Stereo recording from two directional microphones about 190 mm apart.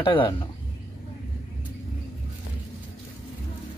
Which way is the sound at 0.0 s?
25° left (ahead or behind).